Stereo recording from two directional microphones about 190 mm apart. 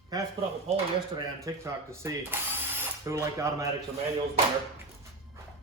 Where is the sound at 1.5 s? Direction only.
15° right (ahead or behind).